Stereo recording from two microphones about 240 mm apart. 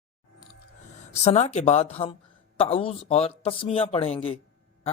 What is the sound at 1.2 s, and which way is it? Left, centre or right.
Speech, left.